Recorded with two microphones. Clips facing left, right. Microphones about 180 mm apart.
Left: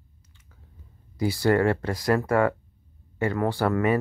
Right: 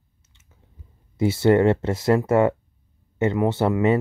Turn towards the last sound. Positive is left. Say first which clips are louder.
# right 3 dB
turn(degrees=-25)  # may be behind; listen again after turning